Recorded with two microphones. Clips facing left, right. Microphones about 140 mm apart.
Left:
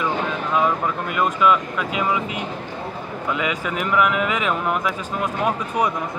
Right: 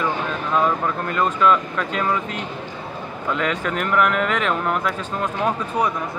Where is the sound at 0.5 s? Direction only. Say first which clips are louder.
Right 1 dB; 10° left (ahead or behind).